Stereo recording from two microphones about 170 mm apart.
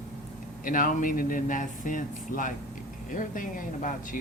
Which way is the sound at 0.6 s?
50° left (ahead or behind).